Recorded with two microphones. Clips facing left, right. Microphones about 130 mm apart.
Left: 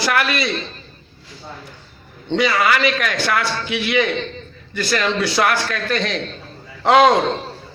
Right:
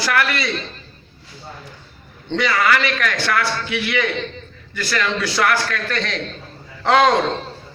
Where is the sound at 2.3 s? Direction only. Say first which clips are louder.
Left 1 dB; 15° left (ahead or behind).